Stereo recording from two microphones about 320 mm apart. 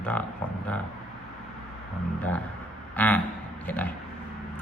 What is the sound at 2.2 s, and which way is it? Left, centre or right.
Speech, centre.